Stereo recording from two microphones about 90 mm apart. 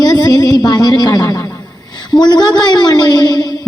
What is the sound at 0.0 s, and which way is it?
Music, 50° left (ahead or behind).